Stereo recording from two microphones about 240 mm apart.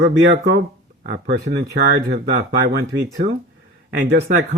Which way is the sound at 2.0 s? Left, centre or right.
Right.